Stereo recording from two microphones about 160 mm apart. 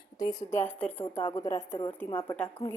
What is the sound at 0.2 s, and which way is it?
Speech, 25° left (ahead or behind).